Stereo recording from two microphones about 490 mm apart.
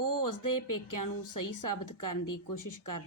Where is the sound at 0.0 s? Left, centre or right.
Left.